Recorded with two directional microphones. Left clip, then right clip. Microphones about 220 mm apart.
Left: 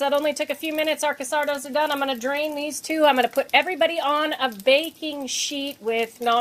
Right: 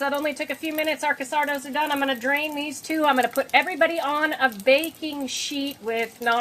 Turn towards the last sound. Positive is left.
turn(degrees=35)  # may be behind; listen again after turning